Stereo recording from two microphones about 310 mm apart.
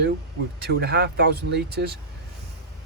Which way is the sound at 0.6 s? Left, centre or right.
Right.